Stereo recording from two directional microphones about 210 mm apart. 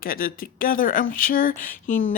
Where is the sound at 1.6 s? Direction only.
40° left (ahead or behind).